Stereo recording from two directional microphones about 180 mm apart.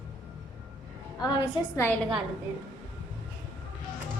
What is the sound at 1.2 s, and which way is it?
Speech, 20° left (ahead or behind).